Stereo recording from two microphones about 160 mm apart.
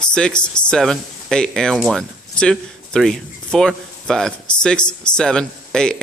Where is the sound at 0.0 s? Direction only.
5° left (ahead or behind).